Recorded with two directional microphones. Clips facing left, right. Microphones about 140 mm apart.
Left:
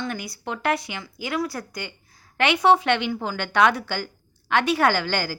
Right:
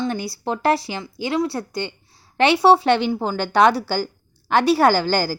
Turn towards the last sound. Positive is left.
turn(degrees=-35)  # may be behind; listen again after turning